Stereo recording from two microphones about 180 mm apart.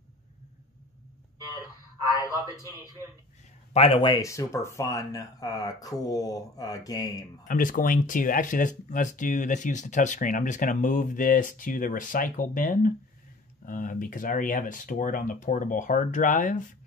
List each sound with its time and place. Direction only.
2.1 s a man's voice: 20° right (ahead or behind)
2.4 s speech: 20° left (ahead or behind)
3.7 s speech: 30° left (ahead or behind)
7.4 s speech: 50° left (ahead or behind)